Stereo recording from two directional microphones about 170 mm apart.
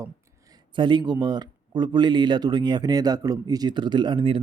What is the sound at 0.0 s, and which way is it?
Speech, 20° right (ahead or behind).